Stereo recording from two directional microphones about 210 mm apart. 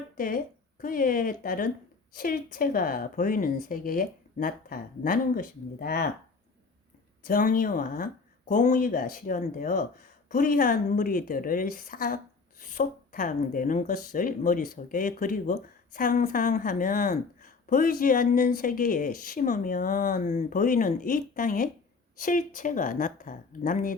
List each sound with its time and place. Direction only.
0.2 s a woman's voice: 40° left (ahead or behind)
7.3 s a woman's voice: 40° left (ahead or behind)